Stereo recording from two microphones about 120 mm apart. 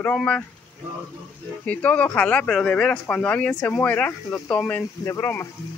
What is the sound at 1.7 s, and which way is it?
Speech, 10° left (ahead or behind).